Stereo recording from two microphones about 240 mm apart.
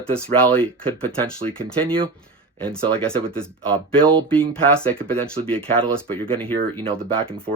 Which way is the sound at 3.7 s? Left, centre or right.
Centre.